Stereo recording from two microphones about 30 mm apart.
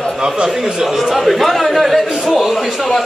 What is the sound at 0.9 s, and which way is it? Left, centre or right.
A man's voice, centre.